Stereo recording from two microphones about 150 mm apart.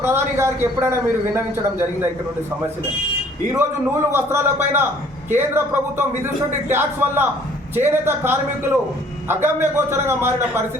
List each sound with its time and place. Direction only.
0.0 s a man's voice: 15° right (ahead or behind)
4.1 s a man's voice: 15° right (ahead or behind)